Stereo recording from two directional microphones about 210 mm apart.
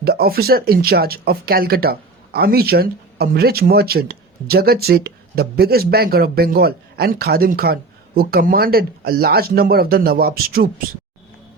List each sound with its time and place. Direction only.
0.0 s speech: 45° right (ahead or behind)